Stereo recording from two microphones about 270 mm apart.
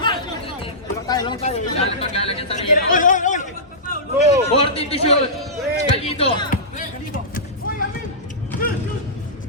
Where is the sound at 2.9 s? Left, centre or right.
Left.